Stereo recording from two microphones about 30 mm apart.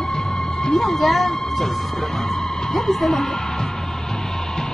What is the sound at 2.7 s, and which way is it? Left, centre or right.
Music, centre.